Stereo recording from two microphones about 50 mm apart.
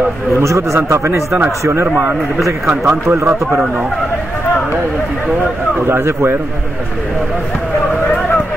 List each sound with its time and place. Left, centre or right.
0.4 s a man's voice: right
0.7 s speech: right
2.6 s a man's voice: centre
2.9 s a man's voice: right
5.9 s speech: right